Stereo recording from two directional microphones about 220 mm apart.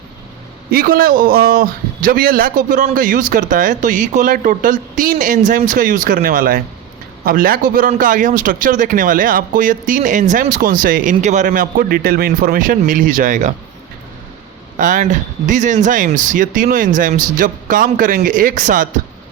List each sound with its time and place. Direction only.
0.7 s a man's voice: 40° right (ahead or behind)
14.8 s a man's voice: 35° right (ahead or behind)